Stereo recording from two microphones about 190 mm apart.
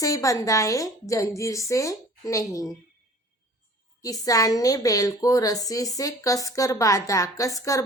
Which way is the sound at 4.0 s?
20° left (ahead or behind).